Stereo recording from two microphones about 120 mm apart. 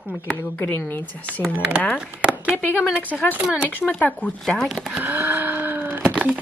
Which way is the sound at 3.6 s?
10° left (ahead or behind).